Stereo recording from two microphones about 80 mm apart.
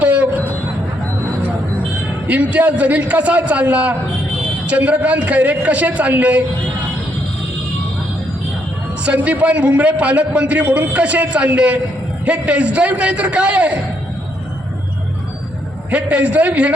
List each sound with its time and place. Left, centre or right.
0.0 s train: centre
2.2 s a man's voice: centre
9.0 s a man's voice: centre
15.9 s a man's voice: centre